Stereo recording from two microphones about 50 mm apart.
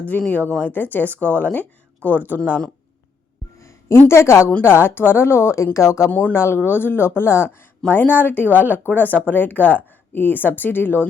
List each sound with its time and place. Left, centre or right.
0.0 s speech: left
0.7 s speech: left
4.1 s a woman's voice: left
5.7 s speech: left
6.1 s speech: left
6.3 s speech: left
7.9 s speech: left